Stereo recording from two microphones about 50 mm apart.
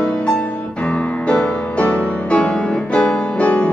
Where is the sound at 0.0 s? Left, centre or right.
Left.